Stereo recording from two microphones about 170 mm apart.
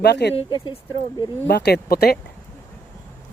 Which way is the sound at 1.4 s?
75° left (ahead or behind).